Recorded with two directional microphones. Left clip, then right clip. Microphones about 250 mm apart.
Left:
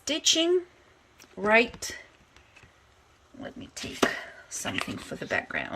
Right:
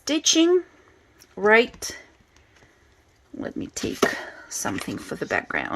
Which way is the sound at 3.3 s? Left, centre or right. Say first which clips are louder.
Right 8 dB; right.